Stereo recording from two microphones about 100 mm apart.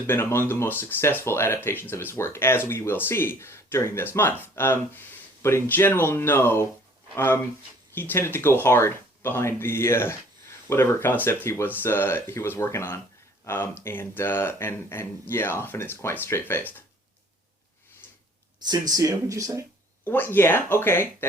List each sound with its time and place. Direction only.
0.1 s speech: 25° left (ahead or behind)
7.9 s speech: 20° left (ahead or behind)
18.0 s a sound: 45° right (ahead or behind)
18.7 s speech: 35° right (ahead or behind)
20.1 s speech: 20° left (ahead or behind)